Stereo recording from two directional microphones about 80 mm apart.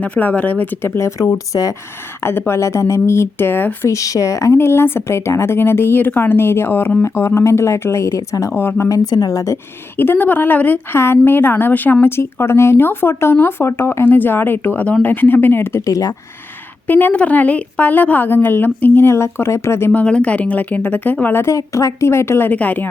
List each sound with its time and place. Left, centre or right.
0.0 s a woman's voice: left
3.8 s a woman's voice: left
8.5 s speech: left
8.9 s a woman's voice: left
10.0 s speech: left
15.9 s a woman's voice: left
16.8 s speech: left
19.9 s speech: centre
21.4 s a woman's voice: left
22.4 s speech: left